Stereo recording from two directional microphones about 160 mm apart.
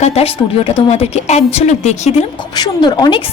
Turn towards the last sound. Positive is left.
turn(degrees=25)  # may be behind; listen again after turning